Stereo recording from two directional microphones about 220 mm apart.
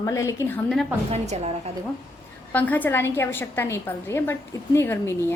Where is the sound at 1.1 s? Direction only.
30° right (ahead or behind).